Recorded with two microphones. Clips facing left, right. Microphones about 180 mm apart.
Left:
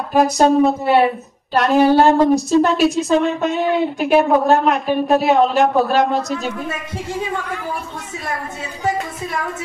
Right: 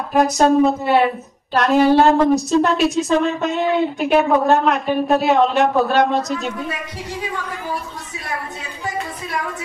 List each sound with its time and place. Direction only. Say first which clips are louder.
0.1 s a woman's voice: left 1 dB; centre (ahead or behind)